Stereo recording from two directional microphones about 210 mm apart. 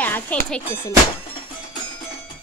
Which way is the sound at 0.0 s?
10° left (ahead or behind).